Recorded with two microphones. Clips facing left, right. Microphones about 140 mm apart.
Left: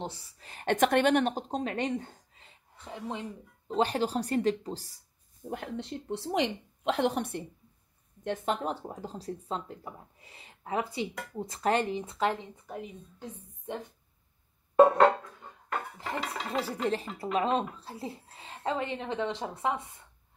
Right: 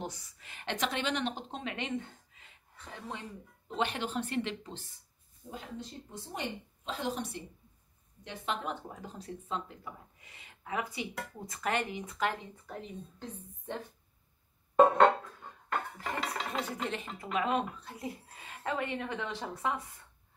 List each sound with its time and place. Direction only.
0.0 s speech: 30° left (ahead or behind)
2.9 s speech: 20° left (ahead or behind)
3.6 s speech: 35° left (ahead or behind)
5.5 s a woman's voice: 65° left (ahead or behind)
8.2 s a woman's voice: 45° left (ahead or behind)
8.8 s speech: 30° left (ahead or behind); by 13.7 s 10° left (ahead or behind)
14.8 s a sound: centre (ahead or behind)
16.2 s a sound: centre (ahead or behind)
16.8 s speech: 35° left (ahead or behind)